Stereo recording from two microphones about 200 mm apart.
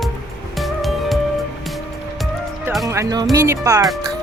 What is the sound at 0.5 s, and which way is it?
Music, centre (ahead or behind).